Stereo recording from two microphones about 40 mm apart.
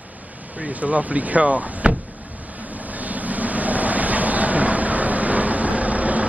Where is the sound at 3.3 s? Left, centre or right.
Right.